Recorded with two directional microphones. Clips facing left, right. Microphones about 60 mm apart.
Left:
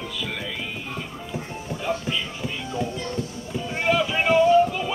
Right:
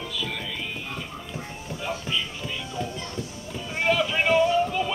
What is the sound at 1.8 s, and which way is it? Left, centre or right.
Music, centre.